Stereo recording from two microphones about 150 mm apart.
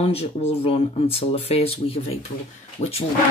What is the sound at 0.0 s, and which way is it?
Speech, 40° left (ahead or behind).